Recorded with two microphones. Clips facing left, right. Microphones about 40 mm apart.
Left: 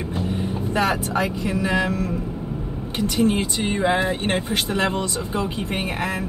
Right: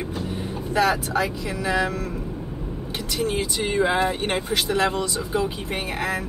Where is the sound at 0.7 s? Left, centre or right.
Left.